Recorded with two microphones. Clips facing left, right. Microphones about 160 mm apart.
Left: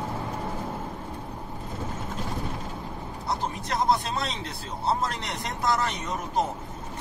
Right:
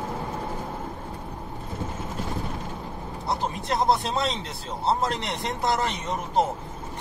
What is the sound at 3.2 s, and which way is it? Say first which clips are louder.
Speech: right 3 dB; 25° right (ahead or behind).